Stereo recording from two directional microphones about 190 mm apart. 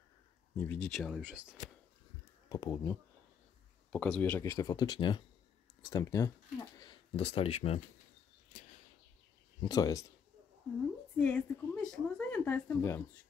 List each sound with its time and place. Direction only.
0.6 s speech: 5° left (ahead or behind)
2.5 s speech: 20° left (ahead or behind)
3.9 s speech: 5° left (ahead or behind); by 7.8 s 30° left (ahead or behind)
9.6 s speech: 20° left (ahead or behind)
11.1 s speech: 5° left (ahead or behind)